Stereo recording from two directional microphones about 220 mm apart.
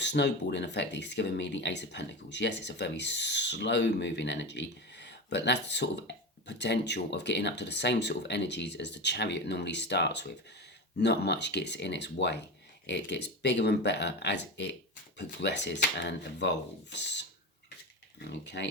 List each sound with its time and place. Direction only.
0.0 s speech: 50° left (ahead or behind)
18.3 s speech: 50° left (ahead or behind)